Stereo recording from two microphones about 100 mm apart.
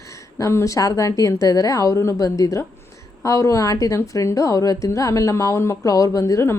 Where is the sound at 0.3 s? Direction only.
30° left (ahead or behind).